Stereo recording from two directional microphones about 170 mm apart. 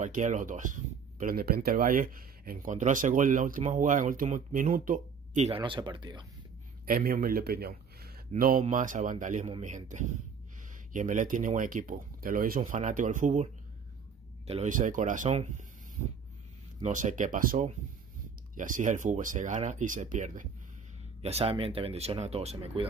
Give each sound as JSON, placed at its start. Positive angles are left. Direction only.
{"t": 0.0, "sound": "speech", "side_deg": -45}
{"t": 5.6, "sound": "speech", "side_deg": -25}
{"t": 6.9, "sound": "a man's voice", "side_deg": -60}
{"t": 14.5, "sound": "speech", "side_deg": -45}
{"t": 16.8, "sound": "speech", "side_deg": -45}
{"t": 21.2, "sound": "speech", "side_deg": -40}